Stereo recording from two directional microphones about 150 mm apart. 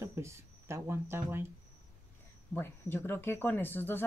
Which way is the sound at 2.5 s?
15° left (ahead or behind).